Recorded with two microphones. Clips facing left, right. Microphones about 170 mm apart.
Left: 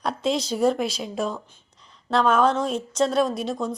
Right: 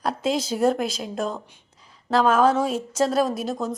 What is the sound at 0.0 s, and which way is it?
Speech, centre (ahead or behind).